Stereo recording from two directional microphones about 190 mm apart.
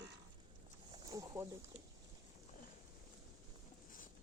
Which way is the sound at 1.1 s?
20° right (ahead or behind).